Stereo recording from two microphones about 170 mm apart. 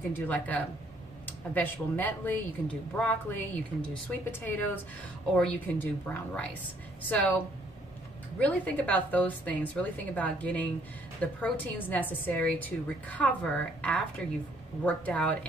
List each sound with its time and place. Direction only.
0.1 s a woman's voice: 10° left (ahead or behind)
8.4 s a woman's voice: 10° left (ahead or behind)